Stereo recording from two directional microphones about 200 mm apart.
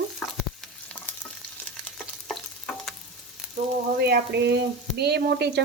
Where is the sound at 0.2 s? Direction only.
5° left (ahead or behind).